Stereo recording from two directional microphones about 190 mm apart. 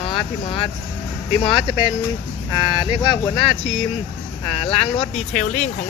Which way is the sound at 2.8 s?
25° left (ahead or behind).